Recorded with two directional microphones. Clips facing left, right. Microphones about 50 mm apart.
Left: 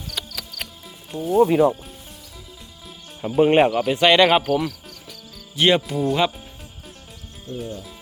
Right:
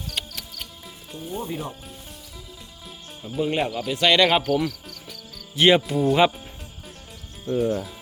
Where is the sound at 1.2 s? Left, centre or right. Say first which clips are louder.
Left 15 dB; left.